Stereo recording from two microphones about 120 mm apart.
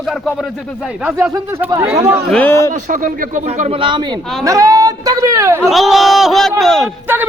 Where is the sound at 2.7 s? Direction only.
90° right; by 3.8 s 65° right (ahead or behind).